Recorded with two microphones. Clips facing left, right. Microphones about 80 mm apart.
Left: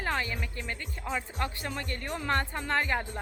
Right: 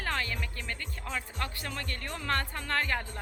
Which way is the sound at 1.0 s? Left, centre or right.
Centre.